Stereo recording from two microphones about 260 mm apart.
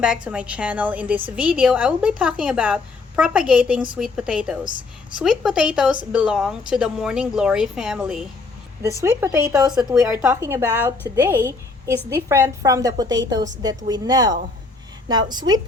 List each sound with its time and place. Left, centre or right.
0.0 s a woman's voice: centre